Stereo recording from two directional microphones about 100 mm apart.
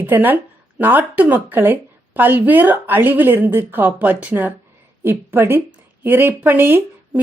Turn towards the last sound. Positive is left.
turn(degrees=-20)  # may be behind; listen again after turning